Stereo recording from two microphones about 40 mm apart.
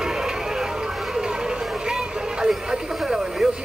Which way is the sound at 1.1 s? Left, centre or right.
Centre.